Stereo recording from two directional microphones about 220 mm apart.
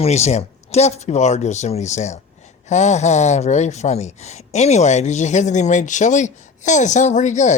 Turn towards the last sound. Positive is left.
turn(degrees=35)  # may be behind; listen again after turning